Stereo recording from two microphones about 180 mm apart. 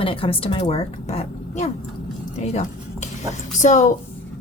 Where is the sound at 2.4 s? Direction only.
40° left (ahead or behind).